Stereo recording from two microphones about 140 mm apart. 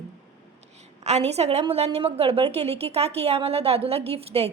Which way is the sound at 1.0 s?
50° right (ahead or behind).